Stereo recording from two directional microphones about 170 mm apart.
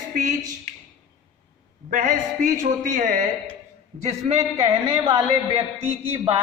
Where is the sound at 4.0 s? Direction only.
35° right (ahead or behind).